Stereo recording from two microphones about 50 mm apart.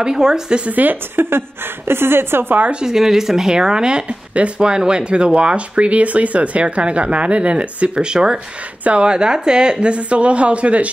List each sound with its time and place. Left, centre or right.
0.0 s a woman's voice: centre
0.7 s a woman's voice: right
1.9 s a woman's voice: right
2.8 s speech: centre; by 10.9 s right